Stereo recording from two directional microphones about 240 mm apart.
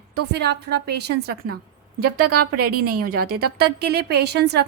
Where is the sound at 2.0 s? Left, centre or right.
Right.